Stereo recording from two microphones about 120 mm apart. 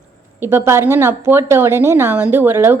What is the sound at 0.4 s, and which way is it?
A woman's voice, 20° right (ahead or behind).